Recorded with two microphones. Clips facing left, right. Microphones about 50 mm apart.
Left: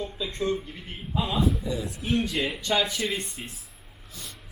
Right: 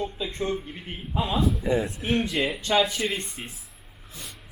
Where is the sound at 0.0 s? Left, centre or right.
Centre.